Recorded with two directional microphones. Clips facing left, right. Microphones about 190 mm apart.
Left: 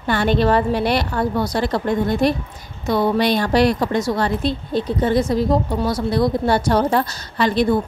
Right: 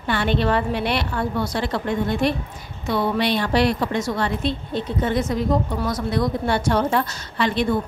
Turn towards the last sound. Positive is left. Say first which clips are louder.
# left 4 dB
turn(degrees=40)  # may be behind; listen again after turning